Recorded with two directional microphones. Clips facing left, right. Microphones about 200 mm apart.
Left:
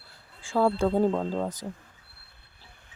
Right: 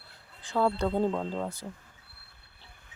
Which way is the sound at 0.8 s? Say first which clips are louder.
Left 4 dB; 10° left (ahead or behind).